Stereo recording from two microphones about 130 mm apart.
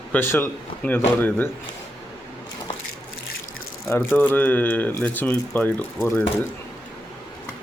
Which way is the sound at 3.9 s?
15° left (ahead or behind).